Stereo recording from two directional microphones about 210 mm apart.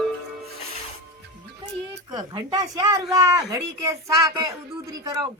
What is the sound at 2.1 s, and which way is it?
Speech, 20° right (ahead or behind).